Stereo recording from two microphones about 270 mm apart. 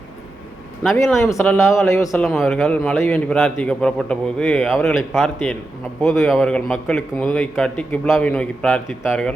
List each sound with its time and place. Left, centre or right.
0.8 s a man's voice: centre